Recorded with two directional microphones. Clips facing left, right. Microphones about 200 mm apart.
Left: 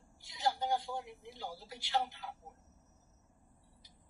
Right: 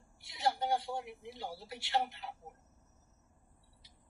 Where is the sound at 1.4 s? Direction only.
20° right (ahead or behind).